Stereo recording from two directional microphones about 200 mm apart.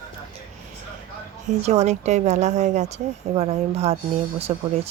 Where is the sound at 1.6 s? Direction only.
35° right (ahead or behind).